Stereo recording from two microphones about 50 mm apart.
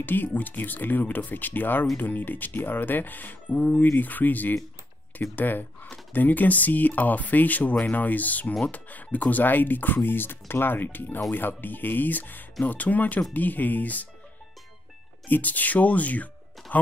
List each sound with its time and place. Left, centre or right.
0.0 s speech: left
15.2 s speech: left